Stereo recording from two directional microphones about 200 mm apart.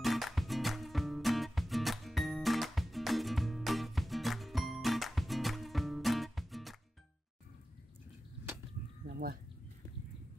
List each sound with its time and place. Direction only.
0.0 s music: centre (ahead or behind)
9.0 s sheep: 50° right (ahead or behind)